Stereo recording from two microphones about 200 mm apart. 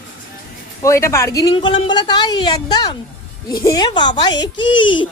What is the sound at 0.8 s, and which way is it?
Speech, 15° left (ahead or behind).